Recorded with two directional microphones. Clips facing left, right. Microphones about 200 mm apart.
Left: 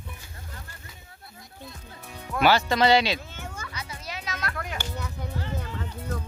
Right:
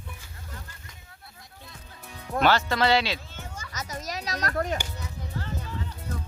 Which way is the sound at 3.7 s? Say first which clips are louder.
Right 3 dB; 40° right (ahead or behind).